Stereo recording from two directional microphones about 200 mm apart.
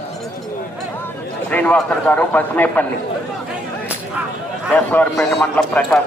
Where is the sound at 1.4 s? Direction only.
5° left (ahead or behind).